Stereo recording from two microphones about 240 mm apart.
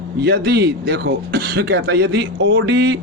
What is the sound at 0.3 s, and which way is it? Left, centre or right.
Speech, right.